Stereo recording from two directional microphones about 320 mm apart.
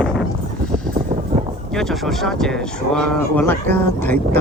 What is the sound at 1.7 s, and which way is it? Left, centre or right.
Speech, centre.